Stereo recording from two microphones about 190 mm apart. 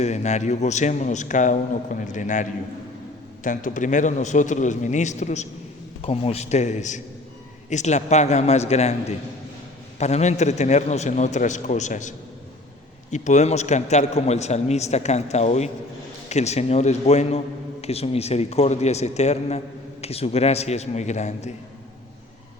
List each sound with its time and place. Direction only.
0.0 s a man's voice: 35° left (ahead or behind)